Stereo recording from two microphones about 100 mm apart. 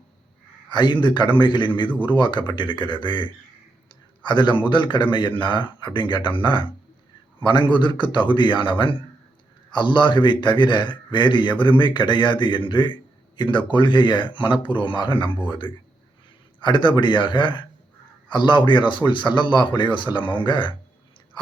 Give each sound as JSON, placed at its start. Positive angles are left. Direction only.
{"t": 0.7, "sound": "a man's voice", "side_deg": 50}